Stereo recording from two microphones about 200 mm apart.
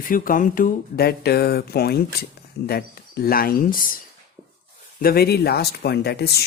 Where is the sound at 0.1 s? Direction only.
45° left (ahead or behind).